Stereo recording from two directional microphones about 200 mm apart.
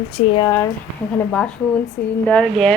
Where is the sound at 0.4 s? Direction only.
15° left (ahead or behind).